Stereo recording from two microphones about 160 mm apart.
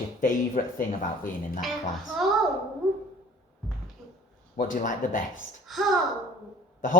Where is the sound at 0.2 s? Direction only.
60° left (ahead or behind).